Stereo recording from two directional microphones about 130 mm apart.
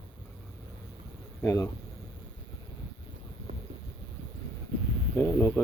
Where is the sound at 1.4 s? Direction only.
20° left (ahead or behind).